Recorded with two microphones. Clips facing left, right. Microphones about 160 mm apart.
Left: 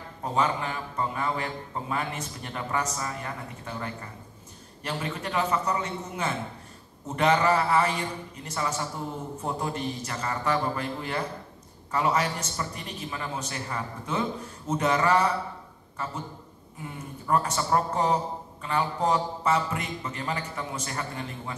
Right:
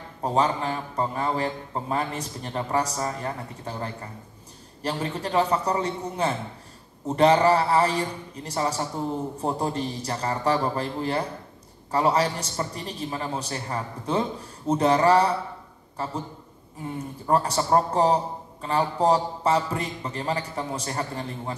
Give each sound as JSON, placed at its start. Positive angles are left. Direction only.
{"t": 0.2, "sound": "a man's voice", "side_deg": -35}
{"t": 17.3, "sound": "a man's voice", "side_deg": -35}